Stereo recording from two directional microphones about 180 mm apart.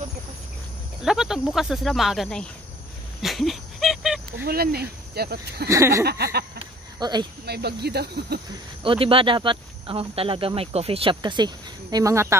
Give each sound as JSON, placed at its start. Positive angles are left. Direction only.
{"t": 1.0, "sound": "speech", "side_deg": -5}
{"t": 3.2, "sound": "dog", "side_deg": 0}
{"t": 4.5, "sound": "speech", "side_deg": -60}
{"t": 5.7, "sound": "a sound", "side_deg": -15}
{"t": 6.0, "sound": "speech", "side_deg": -60}
{"t": 6.6, "sound": "a sound", "side_deg": -25}
{"t": 7.4, "sound": "speech", "side_deg": -65}
{"t": 8.8, "sound": "speech", "side_deg": -30}